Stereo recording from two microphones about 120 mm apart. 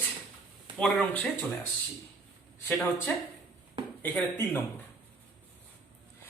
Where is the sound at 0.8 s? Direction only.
10° left (ahead or behind).